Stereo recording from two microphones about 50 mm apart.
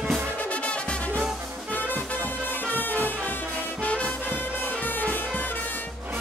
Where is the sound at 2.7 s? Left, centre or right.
Left.